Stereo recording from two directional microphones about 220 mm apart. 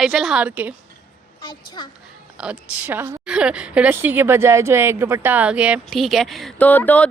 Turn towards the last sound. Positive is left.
turn(degrees=5)  # may be behind; listen again after turning